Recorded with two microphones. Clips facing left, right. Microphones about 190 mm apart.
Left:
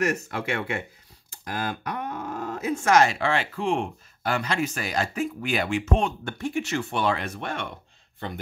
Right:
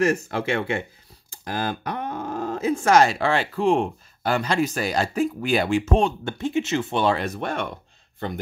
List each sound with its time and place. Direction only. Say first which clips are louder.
0.0 s speech: right 5 dB; 30° right (ahead or behind)